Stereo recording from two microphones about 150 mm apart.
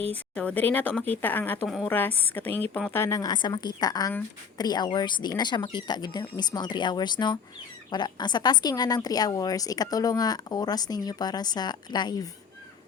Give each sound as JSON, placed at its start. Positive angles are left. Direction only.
{"t": 0.1, "sound": "a woman's voice", "side_deg": 10}
{"t": 1.6, "sound": "a woman's voice", "side_deg": 0}
{"t": 1.9, "sound": "a woman's voice", "side_deg": 10}